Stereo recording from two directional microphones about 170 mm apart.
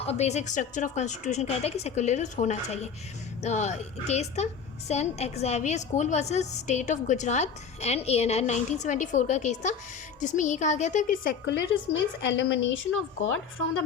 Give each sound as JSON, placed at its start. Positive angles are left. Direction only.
{"t": 0.0, "sound": "a woman's voice", "side_deg": 40}
{"t": 11.4, "sound": "a woman's voice", "side_deg": 90}